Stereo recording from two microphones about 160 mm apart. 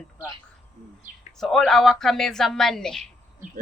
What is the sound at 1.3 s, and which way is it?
Speech, centre (ahead or behind).